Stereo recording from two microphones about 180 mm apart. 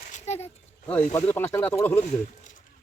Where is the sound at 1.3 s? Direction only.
10° left (ahead or behind).